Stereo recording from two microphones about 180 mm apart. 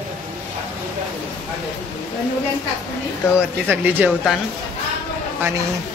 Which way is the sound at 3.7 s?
10° right (ahead or behind).